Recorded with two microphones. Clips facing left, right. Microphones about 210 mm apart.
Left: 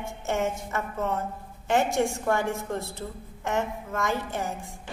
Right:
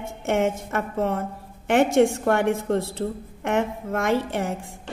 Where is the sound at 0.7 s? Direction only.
55° right (ahead or behind).